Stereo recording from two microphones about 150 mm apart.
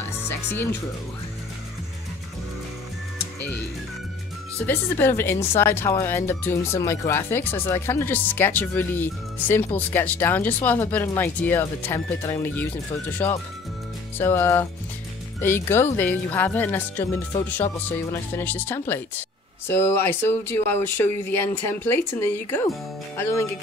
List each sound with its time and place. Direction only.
0.3 s speech: 15° left (ahead or behind)
4.6 s speech: 15° left (ahead or behind)